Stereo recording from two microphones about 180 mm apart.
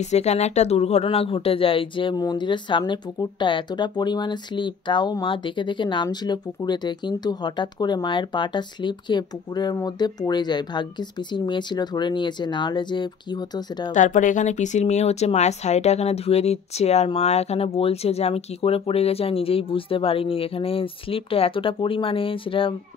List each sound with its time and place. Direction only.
0.0 s speech: 40° left (ahead or behind); by 13.9 s 25° left (ahead or behind)
13.9 s speech: 45° left (ahead or behind); by 22.8 s 30° left (ahead or behind)